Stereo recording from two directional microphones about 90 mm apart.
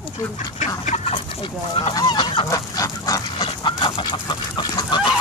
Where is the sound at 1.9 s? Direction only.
50° left (ahead or behind).